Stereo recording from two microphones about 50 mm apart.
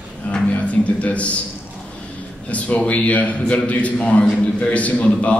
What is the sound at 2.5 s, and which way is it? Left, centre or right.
A man's voice, left.